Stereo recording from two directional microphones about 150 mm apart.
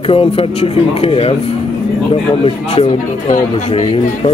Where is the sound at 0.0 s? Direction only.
40° left (ahead or behind).